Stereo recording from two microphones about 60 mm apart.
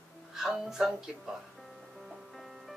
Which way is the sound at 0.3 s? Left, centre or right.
Centre.